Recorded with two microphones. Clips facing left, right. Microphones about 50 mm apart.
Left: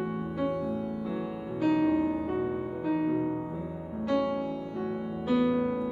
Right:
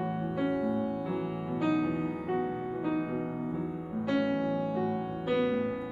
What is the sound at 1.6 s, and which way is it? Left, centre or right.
Music, centre.